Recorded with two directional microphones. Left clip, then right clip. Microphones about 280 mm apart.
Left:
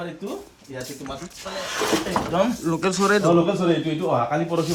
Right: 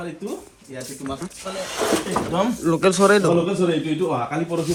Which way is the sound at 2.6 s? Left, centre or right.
Centre.